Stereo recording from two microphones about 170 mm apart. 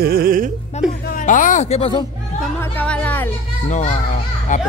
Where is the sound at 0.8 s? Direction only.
40° left (ahead or behind).